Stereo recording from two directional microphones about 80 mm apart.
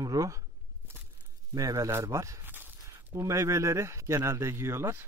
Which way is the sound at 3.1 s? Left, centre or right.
Right.